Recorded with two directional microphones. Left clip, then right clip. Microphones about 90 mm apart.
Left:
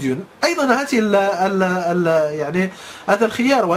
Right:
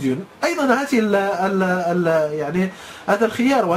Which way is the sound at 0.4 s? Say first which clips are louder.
Left 2 dB; 25° left (ahead or behind).